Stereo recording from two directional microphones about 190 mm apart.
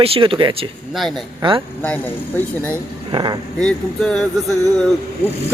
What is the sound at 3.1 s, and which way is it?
Speech, 25° right (ahead or behind).